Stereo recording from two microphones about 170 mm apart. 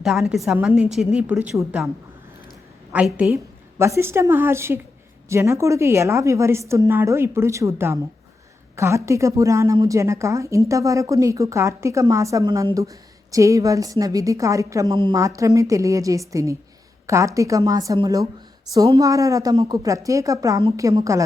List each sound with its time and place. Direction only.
0.0 s a woman's voice: centre (ahead or behind)
2.9 s a woman's voice: 10° right (ahead or behind)